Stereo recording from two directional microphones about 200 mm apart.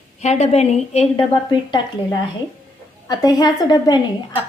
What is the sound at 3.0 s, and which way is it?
Speech, 20° left (ahead or behind).